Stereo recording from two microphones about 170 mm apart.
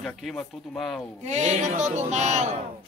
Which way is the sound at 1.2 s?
40° right (ahead or behind).